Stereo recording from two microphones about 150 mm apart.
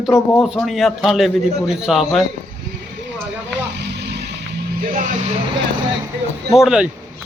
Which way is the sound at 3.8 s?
90° right.